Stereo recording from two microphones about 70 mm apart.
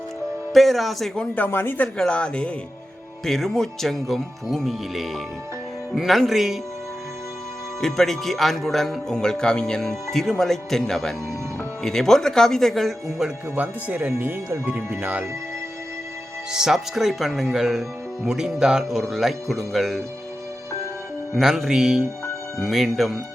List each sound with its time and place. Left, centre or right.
0.5 s speech: centre
1.5 s speech: left
2.0 s a woman's voice: centre
7.8 s speech: centre
13.6 s speech: right
14.1 s speech: right
16.5 s speech: centre
21.3 s speech: centre